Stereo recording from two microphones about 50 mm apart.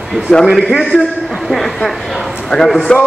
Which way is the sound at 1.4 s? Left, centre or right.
Centre.